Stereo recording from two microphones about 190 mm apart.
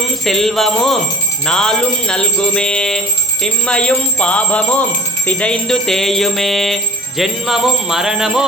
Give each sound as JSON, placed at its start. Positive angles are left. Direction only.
{"t": 0.3, "sound": "jingle bell", "side_deg": 0}